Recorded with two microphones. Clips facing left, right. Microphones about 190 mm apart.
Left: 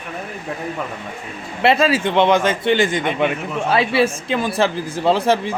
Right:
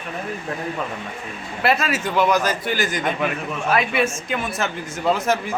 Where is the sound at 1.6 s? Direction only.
25° left (ahead or behind).